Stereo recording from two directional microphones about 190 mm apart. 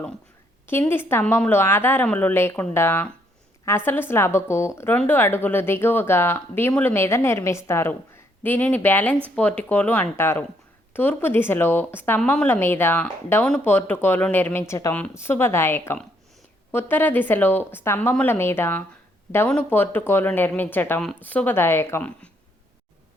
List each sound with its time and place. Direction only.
0.7 s a woman's voice: 10° left (ahead or behind)